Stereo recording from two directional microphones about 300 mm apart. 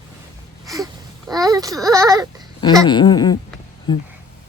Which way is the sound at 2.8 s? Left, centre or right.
Centre.